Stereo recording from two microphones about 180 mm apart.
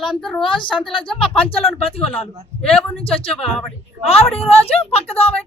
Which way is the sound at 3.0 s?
30° left (ahead or behind).